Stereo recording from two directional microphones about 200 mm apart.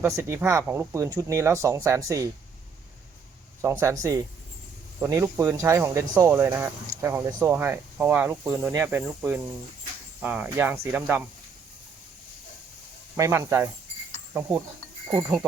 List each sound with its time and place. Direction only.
0.0 s speech: 10° right (ahead or behind)
3.6 s speech: 15° right (ahead or behind)
13.1 s speech: 15° right (ahead or behind)